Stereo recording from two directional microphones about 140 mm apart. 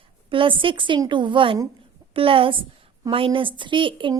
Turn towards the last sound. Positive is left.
turn(degrees=-35)  # may be behind; listen again after turning